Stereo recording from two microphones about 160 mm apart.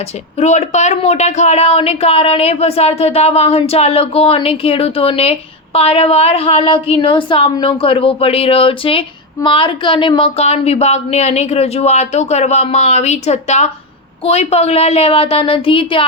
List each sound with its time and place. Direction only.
0.3 s a woman's voice: 45° left (ahead or behind)